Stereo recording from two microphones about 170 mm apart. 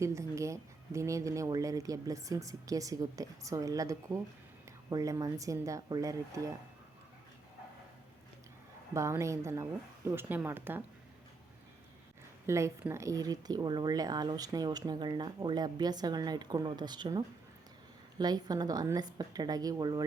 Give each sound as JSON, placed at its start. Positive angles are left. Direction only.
{"t": 0.0, "sound": "speech", "side_deg": -15}
{"t": 8.9, "sound": "speech", "side_deg": -15}
{"t": 12.5, "sound": "speech", "side_deg": -15}